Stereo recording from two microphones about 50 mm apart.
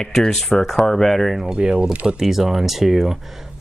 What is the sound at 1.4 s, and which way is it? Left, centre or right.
Speech, centre.